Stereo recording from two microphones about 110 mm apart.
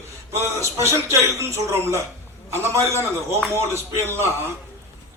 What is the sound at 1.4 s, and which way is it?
A man's voice, 25° right (ahead or behind).